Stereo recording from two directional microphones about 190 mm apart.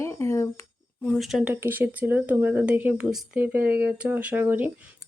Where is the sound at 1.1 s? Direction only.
Centre (ahead or behind).